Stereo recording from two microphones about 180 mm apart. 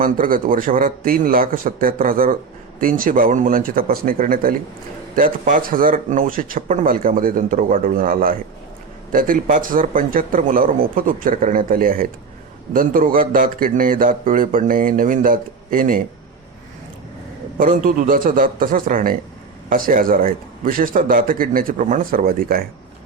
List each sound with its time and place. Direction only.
0.0 s a man's voice: 50° right (ahead or behind)
17.6 s a man's voice: 50° right (ahead or behind)